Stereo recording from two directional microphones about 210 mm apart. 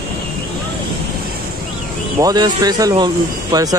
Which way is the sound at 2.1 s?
20° right (ahead or behind).